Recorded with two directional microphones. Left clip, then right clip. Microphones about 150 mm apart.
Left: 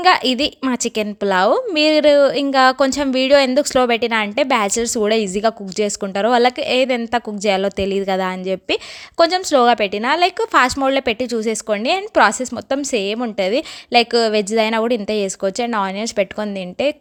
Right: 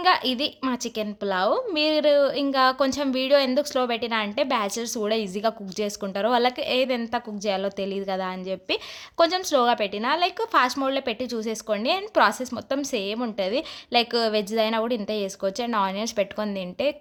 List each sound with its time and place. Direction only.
0.0 s a woman's voice: 45° left (ahead or behind)
9.1 s a woman's voice: 35° left (ahead or behind)